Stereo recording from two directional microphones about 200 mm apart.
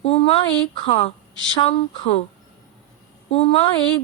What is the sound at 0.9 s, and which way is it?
A woman's voice, 30° left (ahead or behind).